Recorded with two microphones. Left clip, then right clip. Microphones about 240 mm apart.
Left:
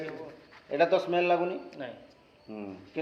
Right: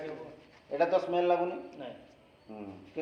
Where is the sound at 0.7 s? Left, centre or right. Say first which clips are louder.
Left 3 dB; left.